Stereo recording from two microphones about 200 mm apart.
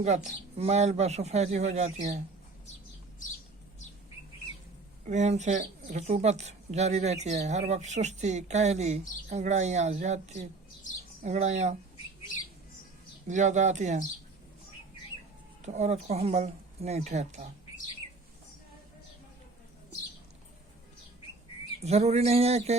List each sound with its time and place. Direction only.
0.3 s speech: 35° right (ahead or behind)
5.0 s speech: 35° right (ahead or behind)
13.2 s speech: 35° right (ahead or behind)
15.6 s speech: 35° right (ahead or behind)
21.8 s speech: 30° right (ahead or behind)